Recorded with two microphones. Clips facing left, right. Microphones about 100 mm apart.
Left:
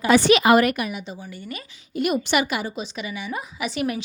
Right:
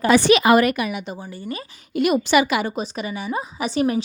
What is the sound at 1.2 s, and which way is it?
Speech, 35° right (ahead or behind).